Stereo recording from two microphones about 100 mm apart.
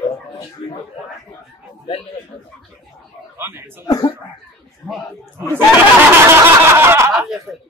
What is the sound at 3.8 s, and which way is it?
Speech, 40° left (ahead or behind).